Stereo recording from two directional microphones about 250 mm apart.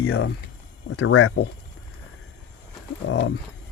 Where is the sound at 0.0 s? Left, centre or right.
Left.